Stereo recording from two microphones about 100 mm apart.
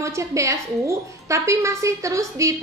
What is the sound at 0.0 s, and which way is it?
A woman's voice, 30° right (ahead or behind).